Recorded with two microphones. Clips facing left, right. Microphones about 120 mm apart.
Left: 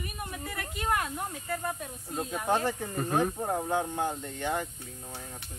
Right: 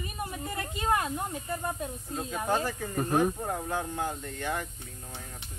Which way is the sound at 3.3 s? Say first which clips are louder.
Left 3 dB; 20° left (ahead or behind).